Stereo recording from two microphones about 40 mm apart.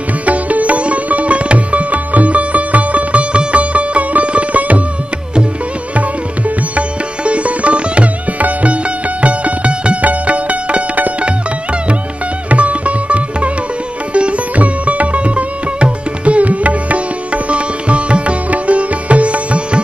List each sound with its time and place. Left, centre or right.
0.2 s sitar: right
7.2 s sitar: right
12.4 s sitar: right